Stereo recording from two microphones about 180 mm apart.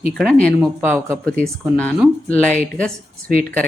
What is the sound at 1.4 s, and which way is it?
Speech, 5° left (ahead or behind).